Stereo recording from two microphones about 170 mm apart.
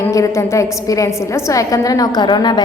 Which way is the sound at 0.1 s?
20° left (ahead or behind).